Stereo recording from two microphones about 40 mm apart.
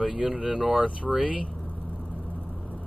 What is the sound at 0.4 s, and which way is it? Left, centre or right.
Speech, centre.